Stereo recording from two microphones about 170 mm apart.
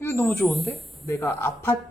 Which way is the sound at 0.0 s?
15° left (ahead or behind).